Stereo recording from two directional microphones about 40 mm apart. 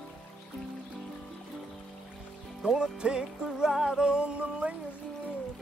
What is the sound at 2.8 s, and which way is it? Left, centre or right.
Speech, right.